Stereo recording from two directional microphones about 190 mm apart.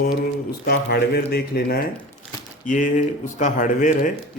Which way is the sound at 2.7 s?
40° left (ahead or behind).